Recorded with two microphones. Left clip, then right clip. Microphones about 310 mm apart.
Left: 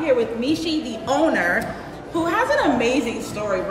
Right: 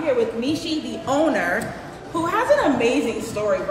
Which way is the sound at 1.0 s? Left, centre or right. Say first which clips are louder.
Left 1 dB; centre.